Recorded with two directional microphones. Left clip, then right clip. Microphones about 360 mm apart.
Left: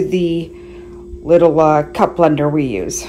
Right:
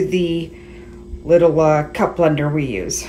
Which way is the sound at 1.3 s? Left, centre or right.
Centre.